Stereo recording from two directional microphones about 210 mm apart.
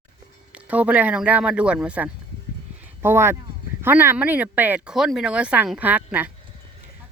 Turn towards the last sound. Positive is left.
turn(degrees=-5)  # may be behind; listen again after turning